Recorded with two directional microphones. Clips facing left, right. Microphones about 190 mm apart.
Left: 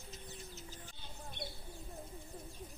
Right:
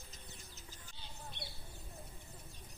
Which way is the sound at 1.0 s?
50° left (ahead or behind).